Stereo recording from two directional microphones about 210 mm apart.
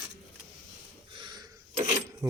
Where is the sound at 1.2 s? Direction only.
20° right (ahead or behind).